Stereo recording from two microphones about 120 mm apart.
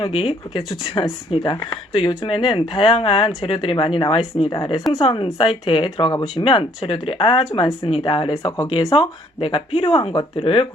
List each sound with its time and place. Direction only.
0.0 s speech: 50° left (ahead or behind)
4.9 s speech: 50° left (ahead or behind)
6.2 s speech: 50° left (ahead or behind)